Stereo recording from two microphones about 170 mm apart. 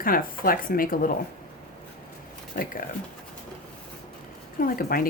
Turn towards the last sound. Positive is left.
turn(degrees=60)  # may be behind; listen again after turning